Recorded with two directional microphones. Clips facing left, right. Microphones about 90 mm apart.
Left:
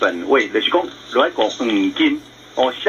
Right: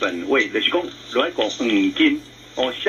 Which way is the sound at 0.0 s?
40° left (ahead or behind).